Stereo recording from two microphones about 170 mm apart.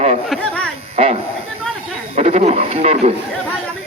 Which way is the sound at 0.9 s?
40° right (ahead or behind).